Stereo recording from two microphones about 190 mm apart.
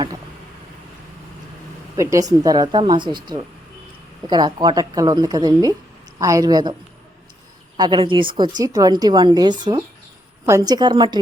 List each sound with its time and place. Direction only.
2.0 s a woman's voice: 15° right (ahead or behind)
7.8 s a woman's voice: 25° right (ahead or behind)